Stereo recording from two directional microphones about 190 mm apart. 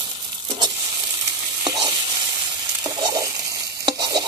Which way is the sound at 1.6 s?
25° right (ahead or behind).